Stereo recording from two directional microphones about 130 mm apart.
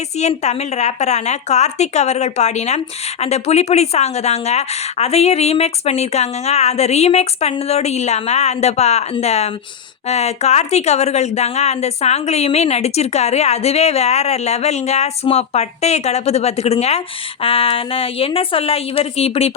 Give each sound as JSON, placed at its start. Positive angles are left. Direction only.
{"t": 0.2, "sound": "a woman's voice", "side_deg": 60}